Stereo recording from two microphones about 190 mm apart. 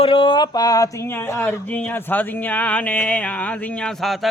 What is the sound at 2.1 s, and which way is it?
Chant, 10° left (ahead or behind).